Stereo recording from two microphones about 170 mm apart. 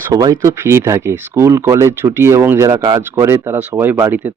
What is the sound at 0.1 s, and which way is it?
Speech, 20° right (ahead or behind).